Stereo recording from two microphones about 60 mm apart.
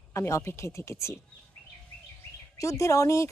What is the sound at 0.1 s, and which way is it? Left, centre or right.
Speech, left.